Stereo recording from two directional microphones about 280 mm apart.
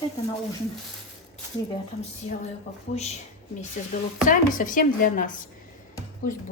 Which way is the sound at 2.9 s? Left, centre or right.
Left.